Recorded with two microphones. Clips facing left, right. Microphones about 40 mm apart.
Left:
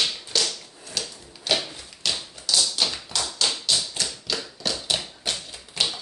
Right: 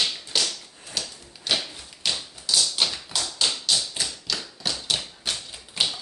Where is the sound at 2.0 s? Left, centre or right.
Centre.